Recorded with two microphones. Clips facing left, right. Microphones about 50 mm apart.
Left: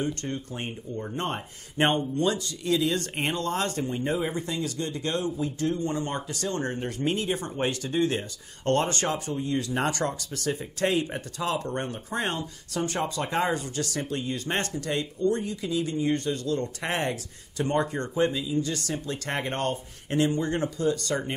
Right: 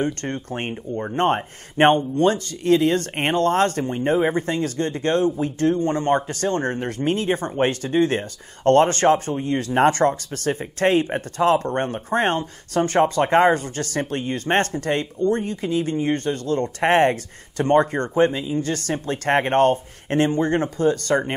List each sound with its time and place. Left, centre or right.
0.0 s speech: right